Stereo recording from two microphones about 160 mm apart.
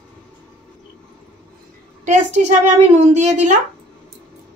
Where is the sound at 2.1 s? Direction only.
50° right (ahead or behind).